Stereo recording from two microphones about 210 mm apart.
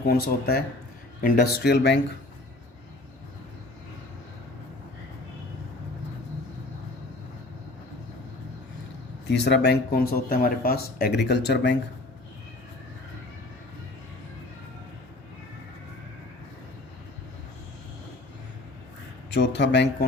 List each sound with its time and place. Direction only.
0.1 s speech: 45° left (ahead or behind)
9.2 s speech: 55° left (ahead or behind)
19.3 s a man's voice: 55° left (ahead or behind)